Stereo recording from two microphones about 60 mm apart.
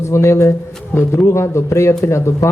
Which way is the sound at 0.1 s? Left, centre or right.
Left.